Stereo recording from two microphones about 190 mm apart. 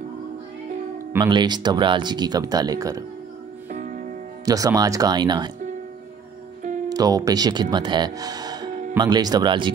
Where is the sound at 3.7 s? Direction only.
45° right (ahead or behind).